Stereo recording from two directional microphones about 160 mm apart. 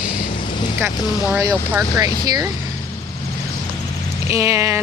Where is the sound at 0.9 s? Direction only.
15° right (ahead or behind).